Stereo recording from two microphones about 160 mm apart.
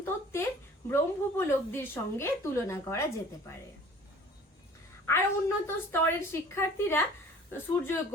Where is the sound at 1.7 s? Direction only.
15° left (ahead or behind).